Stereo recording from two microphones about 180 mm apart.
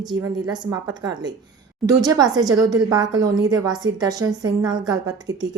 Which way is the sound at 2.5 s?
20° right (ahead or behind).